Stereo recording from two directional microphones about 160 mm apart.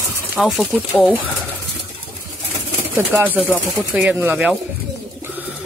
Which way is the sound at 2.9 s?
15° right (ahead or behind).